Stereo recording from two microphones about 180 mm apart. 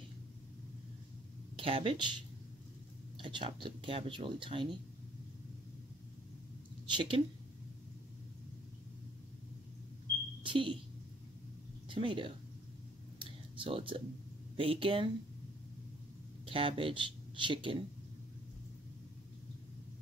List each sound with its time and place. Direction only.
1.6 s speech: 30° right (ahead or behind)
6.9 s speech: 25° right (ahead or behind)
10.4 s speech: 30° right (ahead or behind)
11.9 s speech: 25° right (ahead or behind)
13.2 s a sound: 30° right (ahead or behind)
14.6 s speech: 30° right (ahead or behind)
16.4 s speech: 30° right (ahead or behind)